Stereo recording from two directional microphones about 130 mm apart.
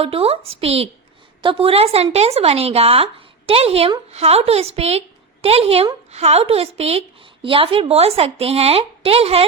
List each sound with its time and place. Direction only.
0.0 s a woman's voice: 50° right (ahead or behind)